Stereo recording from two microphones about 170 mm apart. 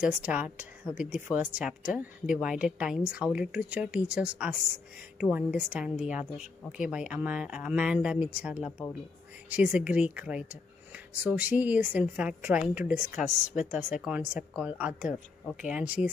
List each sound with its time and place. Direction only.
0.0 s a woman's voice: 5° right (ahead or behind)
13.1 s speech: 50° left (ahead or behind)
13.7 s a woman's voice: 5° right (ahead or behind)